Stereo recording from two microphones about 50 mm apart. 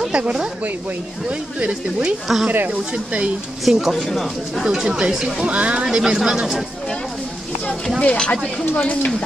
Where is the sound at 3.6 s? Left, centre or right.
Centre.